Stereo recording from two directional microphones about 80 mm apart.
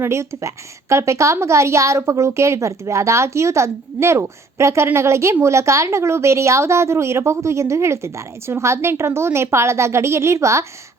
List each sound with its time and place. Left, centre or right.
0.0 s a woman's voice: right